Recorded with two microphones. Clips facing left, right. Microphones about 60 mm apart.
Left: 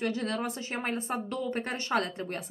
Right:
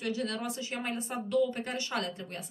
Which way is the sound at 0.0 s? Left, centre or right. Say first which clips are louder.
Left 3 dB; left.